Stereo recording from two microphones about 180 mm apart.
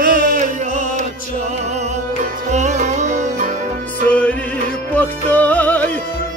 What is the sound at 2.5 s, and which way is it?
Music, 40° right (ahead or behind).